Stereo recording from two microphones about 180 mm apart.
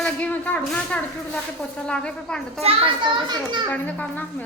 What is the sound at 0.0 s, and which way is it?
A woman's voice, 10° left (ahead or behind).